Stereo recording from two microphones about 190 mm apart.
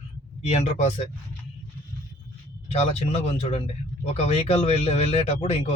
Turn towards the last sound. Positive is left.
turn(degrees=35)  # may be behind; listen again after turning